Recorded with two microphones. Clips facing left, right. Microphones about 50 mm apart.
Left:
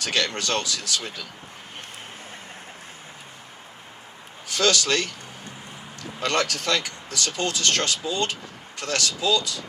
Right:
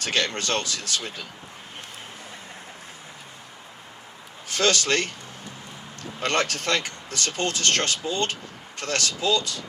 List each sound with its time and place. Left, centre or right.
0.0 s speech: right
4.4 s a man's voice: right